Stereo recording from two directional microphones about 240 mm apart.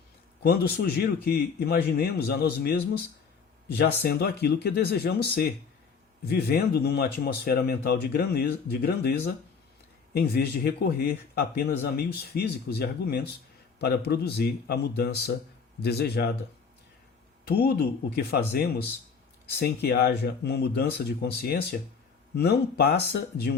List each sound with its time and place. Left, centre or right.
0.4 s speech: left
10.2 s speech: left
17.5 s speech: left